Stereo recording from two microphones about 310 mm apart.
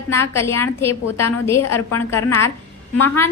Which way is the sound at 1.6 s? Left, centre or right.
Left.